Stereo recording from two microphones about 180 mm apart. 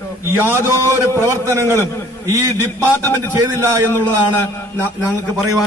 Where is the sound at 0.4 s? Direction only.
10° right (ahead or behind).